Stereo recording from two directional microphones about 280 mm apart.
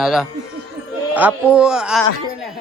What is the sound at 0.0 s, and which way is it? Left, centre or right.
Speech, centre.